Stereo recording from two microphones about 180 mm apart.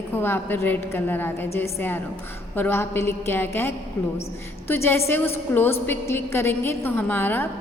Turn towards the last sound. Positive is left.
turn(degrees=10)  # may be behind; listen again after turning